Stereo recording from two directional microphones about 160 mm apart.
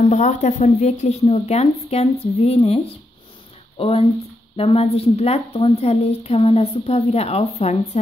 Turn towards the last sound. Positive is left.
turn(degrees=40)  # may be behind; listen again after turning